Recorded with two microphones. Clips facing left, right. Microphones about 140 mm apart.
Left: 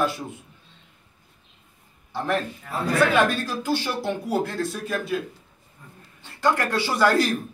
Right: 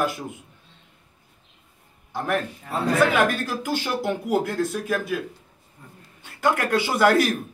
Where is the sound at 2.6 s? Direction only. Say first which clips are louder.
Right 2 dB; 20° right (ahead or behind); by 5.2 s 5° right (ahead or behind).